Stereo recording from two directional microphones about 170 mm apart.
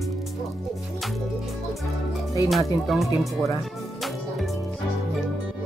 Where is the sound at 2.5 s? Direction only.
Centre (ahead or behind).